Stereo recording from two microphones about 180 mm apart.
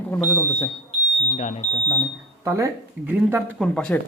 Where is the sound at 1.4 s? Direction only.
40° left (ahead or behind).